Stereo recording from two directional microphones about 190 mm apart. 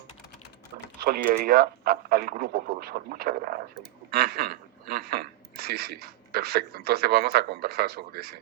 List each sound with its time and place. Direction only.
1.0 s a woman's voice: 50° right (ahead or behind)